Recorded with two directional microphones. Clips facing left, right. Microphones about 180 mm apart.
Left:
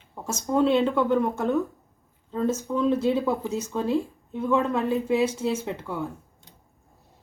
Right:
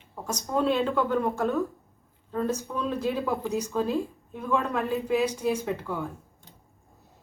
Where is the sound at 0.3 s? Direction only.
25° left (ahead or behind).